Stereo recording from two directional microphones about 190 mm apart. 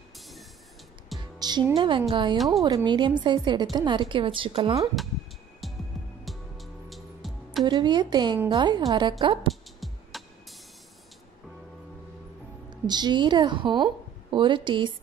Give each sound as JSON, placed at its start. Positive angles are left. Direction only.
{"t": 1.1, "sound": "music", "side_deg": 0}
{"t": 1.8, "sound": "a woman's voice", "side_deg": -25}
{"t": 2.3, "sound": "speech", "side_deg": 0}
{"t": 2.6, "sound": "a woman's voice", "side_deg": -25}
{"t": 5.6, "sound": "music", "side_deg": 0}
{"t": 7.6, "sound": "a woman's voice", "side_deg": -25}
{"t": 9.5, "sound": "music", "side_deg": 0}
{"t": 12.6, "sound": "a woman's voice", "side_deg": -20}